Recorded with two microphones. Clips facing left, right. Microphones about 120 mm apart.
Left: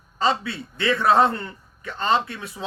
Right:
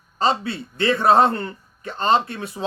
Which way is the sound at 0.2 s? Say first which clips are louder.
Right 2 dB; 30° right (ahead or behind).